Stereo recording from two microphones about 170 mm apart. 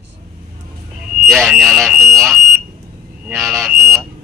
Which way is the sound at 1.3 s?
Centre (ahead or behind).